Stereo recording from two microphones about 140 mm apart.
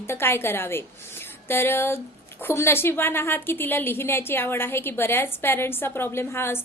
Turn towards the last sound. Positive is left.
turn(degrees=15)  # may be behind; listen again after turning